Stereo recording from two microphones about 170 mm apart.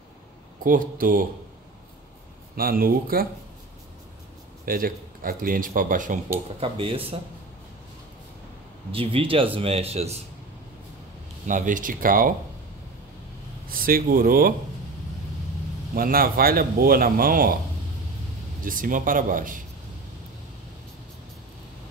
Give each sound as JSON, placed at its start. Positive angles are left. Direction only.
{"t": 0.7, "sound": "a man's voice", "side_deg": -55}
{"t": 2.5, "sound": "a man's voice", "side_deg": -60}
{"t": 4.6, "sound": "speech", "side_deg": -55}
{"t": 6.6, "sound": "speech", "side_deg": -30}
{"t": 8.9, "sound": "speech", "side_deg": -35}
{"t": 11.4, "sound": "speech", "side_deg": -50}
{"t": 13.7, "sound": "a man's voice", "side_deg": -55}
{"t": 15.9, "sound": "a man's voice", "side_deg": -60}
{"t": 18.6, "sound": "speech", "side_deg": -55}